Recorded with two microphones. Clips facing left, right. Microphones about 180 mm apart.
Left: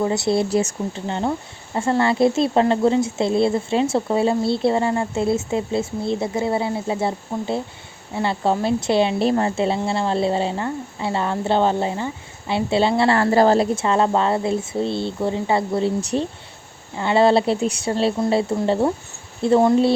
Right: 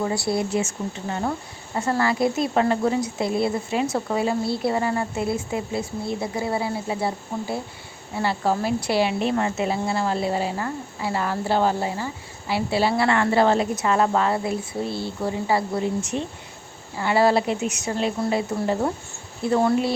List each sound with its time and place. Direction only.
0.0 s speech: 20° left (ahead or behind)
0.5 s speech: 35° left (ahead or behind)
9.2 s speech: 35° left (ahead or behind)
16.0 s speech: 35° left (ahead or behind)
17.0 s speech: 25° left (ahead or behind)